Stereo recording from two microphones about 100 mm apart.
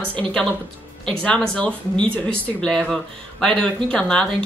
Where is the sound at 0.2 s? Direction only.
10° left (ahead or behind).